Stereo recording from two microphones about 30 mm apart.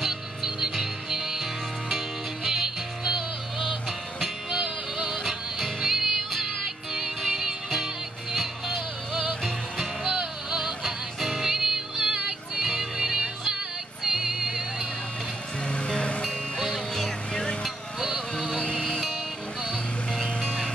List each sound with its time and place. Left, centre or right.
0.0 s music: centre
15.7 s music: left
16.5 s music: centre
17.3 s a sound: left
17.6 s a sound: centre
18.3 s music: centre
20.1 s music: left